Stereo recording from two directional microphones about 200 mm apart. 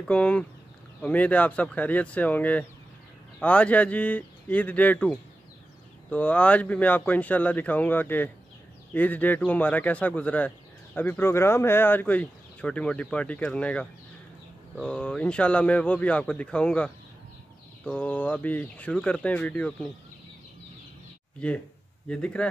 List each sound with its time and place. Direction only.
0.0 s speech: 5° left (ahead or behind)
21.4 s speech: 5° left (ahead or behind)